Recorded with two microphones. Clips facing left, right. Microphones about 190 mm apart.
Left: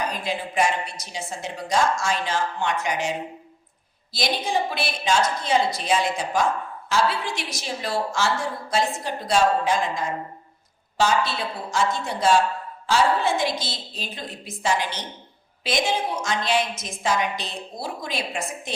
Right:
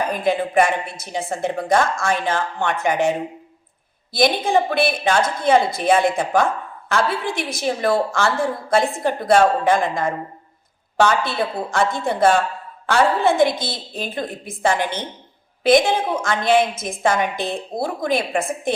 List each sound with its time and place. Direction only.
0.0 s a woman's voice: 55° right (ahead or behind)